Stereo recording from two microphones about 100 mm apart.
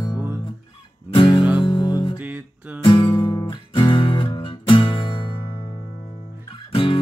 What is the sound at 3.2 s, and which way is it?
Music, 40° left (ahead or behind).